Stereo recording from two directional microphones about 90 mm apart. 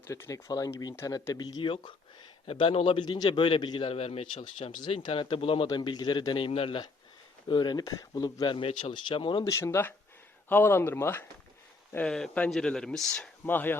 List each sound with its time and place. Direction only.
0.1 s speech: 30° left (ahead or behind)
0.4 s speech: 45° left (ahead or behind)
2.5 s a man's voice: 85° left; by 5.2 s 70° left (ahead or behind)
5.3 s speech: 90° left
5.7 s a man's voice: 55° left (ahead or behind); by 6.8 s 80° left
7.4 s speech: 55° left (ahead or behind)
8.4 s a man's voice: 70° left (ahead or behind)
9.4 s speech: 30° left (ahead or behind)
12.0 s speech: 5° left (ahead or behind)
13.4 s speech: 20° left (ahead or behind)